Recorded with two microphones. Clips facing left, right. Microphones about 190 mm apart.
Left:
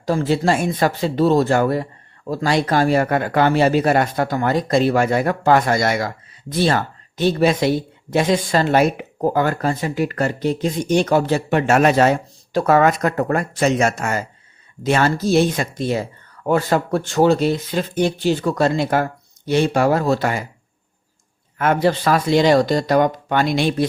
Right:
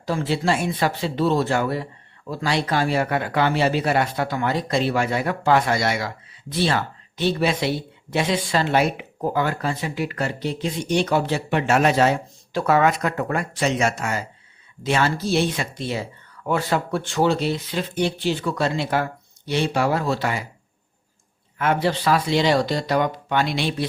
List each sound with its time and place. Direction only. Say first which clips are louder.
0.0 s speech: left 5 dB; 45° left (ahead or behind)
21.6 s speech: left 4 dB; 45° left (ahead or behind)